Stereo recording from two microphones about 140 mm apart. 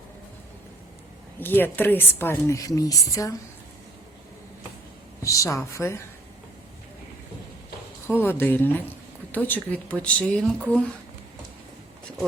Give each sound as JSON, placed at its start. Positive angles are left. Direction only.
{"t": 1.4, "sound": "a woman's voice", "side_deg": 15}
{"t": 5.2, "sound": "a woman's voice", "side_deg": 20}
{"t": 8.0, "sound": "a woman's voice", "side_deg": 15}